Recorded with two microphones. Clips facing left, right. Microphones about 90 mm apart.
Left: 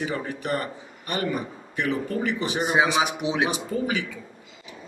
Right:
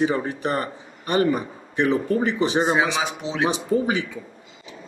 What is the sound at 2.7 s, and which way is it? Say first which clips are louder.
Speech: even; 20° left (ahead or behind).